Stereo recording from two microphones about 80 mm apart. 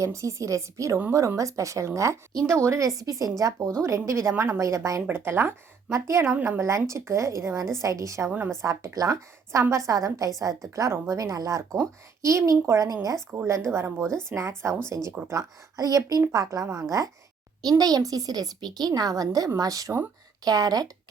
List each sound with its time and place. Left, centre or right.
0.0 s a woman's voice: right
5.0 s a woman's voice: right
13.3 s a woman's voice: right
17.6 s a woman's voice: right